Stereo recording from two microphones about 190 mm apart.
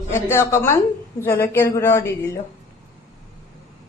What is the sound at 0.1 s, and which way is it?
Speech, 15° left (ahead or behind).